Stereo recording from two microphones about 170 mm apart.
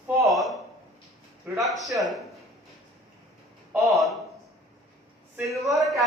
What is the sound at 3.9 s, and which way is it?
Speech, centre (ahead or behind).